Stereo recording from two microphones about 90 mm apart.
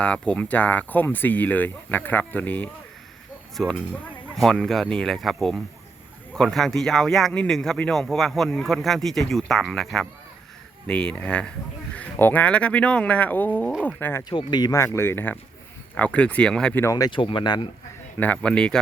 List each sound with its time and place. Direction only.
0.0 s speech: 15° left (ahead or behind)
4.4 s speech: 5° left (ahead or behind); by 14.3 s 25° left (ahead or behind)
14.3 s speech: 55° left (ahead or behind)
14.7 s speech: 30° left (ahead or behind); by 16.7 s 10° left (ahead or behind)
17.1 s speech: 70° left (ahead or behind)
18.2 s speech: 15° left (ahead or behind)